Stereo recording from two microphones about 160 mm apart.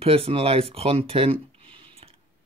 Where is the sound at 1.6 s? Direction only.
35° right (ahead or behind).